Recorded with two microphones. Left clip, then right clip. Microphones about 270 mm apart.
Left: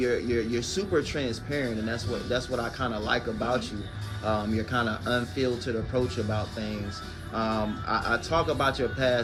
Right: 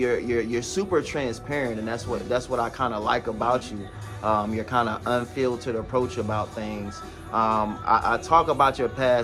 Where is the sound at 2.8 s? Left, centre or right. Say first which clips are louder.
Right 2 dB; centre.